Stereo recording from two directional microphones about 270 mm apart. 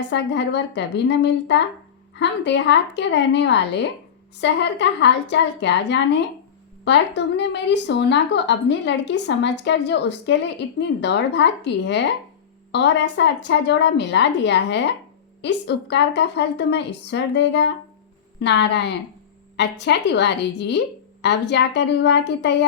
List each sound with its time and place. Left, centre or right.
0.1 s a woman's voice: left